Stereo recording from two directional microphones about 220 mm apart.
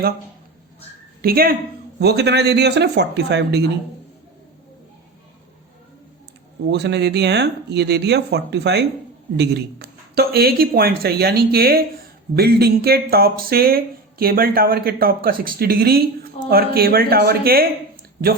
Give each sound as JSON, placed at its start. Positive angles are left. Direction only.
{"t": 1.2, "sound": "speech", "side_deg": -45}
{"t": 6.7, "sound": "speech", "side_deg": -50}